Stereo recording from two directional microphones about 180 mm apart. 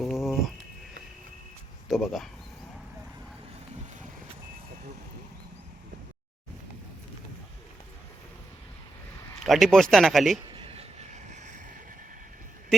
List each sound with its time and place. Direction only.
0.0 s a sound: centre (ahead or behind)
1.9 s speech: centre (ahead or behind)
9.4 s speech: centre (ahead or behind)
10.5 s vehicle: 30° right (ahead or behind)